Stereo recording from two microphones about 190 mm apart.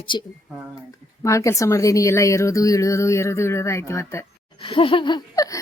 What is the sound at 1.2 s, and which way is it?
Speech, 15° left (ahead or behind).